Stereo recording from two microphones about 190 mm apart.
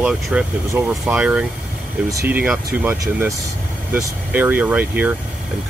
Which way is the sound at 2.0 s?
15° right (ahead or behind).